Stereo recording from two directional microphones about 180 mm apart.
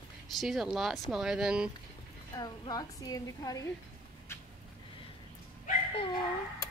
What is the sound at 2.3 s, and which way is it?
A woman's voice, 20° left (ahead or behind).